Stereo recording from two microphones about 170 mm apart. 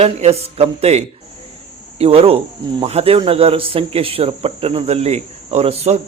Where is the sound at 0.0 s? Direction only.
35° right (ahead or behind).